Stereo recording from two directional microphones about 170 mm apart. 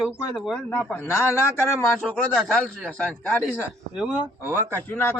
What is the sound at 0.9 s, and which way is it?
A man's voice, 15° left (ahead or behind).